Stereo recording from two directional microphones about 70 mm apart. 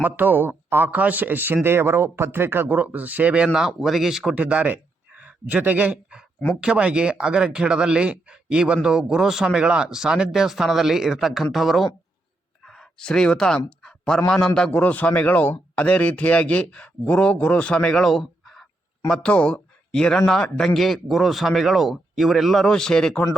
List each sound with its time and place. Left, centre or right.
0.0 s speech: right; by 4.4 s centre
4.4 s speech: centre
13.8 s a sound: centre
14.3 s a man's voice: centre
14.8 s speech: left; by 19.2 s centre
19.2 s speech: centre